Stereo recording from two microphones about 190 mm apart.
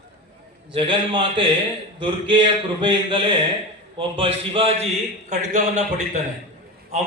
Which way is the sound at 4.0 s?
30° right (ahead or behind).